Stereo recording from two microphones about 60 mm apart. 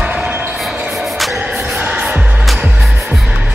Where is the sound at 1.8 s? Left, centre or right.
Centre.